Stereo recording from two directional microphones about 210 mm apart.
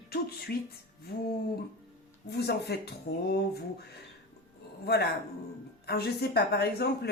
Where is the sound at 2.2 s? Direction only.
50° left (ahead or behind).